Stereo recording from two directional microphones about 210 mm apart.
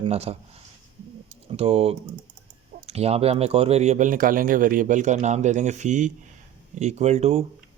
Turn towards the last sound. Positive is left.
turn(degrees=-30)  # may be behind; listen again after turning